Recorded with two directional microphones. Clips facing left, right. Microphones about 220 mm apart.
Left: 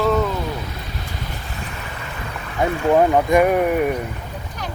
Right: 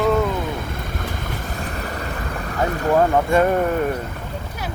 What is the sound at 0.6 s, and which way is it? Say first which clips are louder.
Vehicle: right 4 dB; 50° right (ahead or behind).